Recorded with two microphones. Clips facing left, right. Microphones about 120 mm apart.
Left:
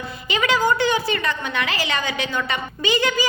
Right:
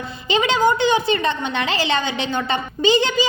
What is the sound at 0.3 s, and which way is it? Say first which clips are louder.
A woman's voice: right 3 dB; 25° right (ahead or behind).